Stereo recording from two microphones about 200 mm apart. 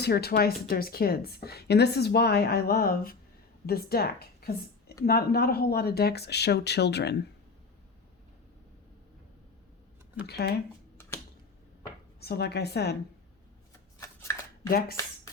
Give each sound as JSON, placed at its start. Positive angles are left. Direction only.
{"t": 0.0, "sound": "a woman's voice", "side_deg": 50}
{"t": 10.2, "sound": "speech", "side_deg": 55}
{"t": 12.2, "sound": "speech", "side_deg": 55}
{"t": 14.2, "sound": "shuffling cards", "side_deg": 15}